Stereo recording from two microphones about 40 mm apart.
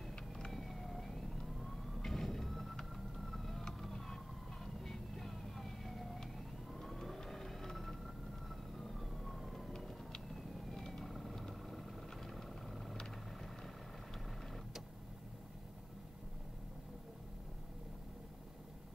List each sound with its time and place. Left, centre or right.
0.5 s vehicle: centre
2.8 s emergency vehicle: centre
4.8 s vehicle: centre
7.2 s a sound: centre
8.7 s fire engine: centre
9.7 s vehicle: centre